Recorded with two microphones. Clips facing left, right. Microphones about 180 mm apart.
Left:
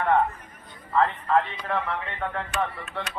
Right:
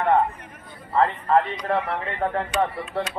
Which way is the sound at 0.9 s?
35° right (ahead or behind).